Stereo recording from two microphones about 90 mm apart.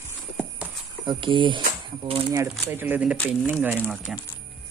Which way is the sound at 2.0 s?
90° right.